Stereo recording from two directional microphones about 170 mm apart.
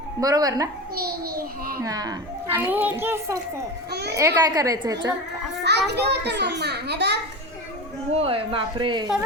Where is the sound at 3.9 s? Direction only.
75° right (ahead or behind).